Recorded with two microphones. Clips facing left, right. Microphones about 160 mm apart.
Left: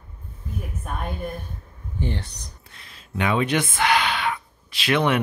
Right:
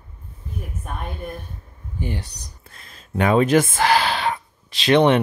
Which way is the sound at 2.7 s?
45° right (ahead or behind).